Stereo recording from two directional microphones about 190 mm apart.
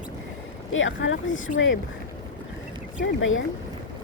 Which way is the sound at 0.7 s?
90° left.